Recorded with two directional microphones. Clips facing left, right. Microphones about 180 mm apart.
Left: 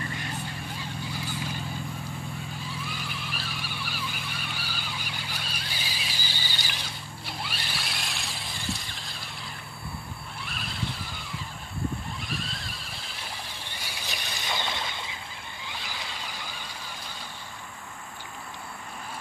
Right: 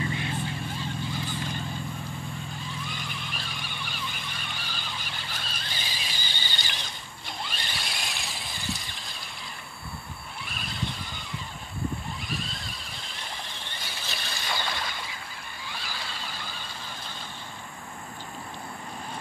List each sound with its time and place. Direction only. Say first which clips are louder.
0.7 s vehicle: right 3 dB; 10° left (ahead or behind)
2.7 s vehicle: left 1 dB; 5° left (ahead or behind)
10.4 s squeal: even; centre (ahead or behind)
12.3 s horse: even; centre (ahead or behind); by 15.1 s 20° left (ahead or behind)
15.7 s vehicle: even; 20° left (ahead or behind)